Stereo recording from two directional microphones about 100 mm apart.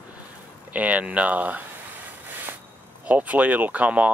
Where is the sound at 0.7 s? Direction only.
15° right (ahead or behind).